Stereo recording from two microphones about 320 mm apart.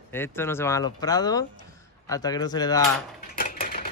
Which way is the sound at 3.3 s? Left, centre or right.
Left.